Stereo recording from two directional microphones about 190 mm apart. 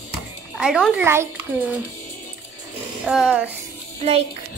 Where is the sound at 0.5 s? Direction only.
Centre (ahead or behind).